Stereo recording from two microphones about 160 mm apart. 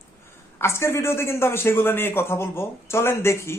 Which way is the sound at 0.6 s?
15° left (ahead or behind).